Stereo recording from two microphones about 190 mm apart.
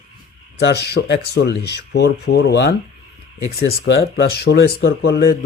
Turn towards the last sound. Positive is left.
turn(degrees=55)  # may be behind; listen again after turning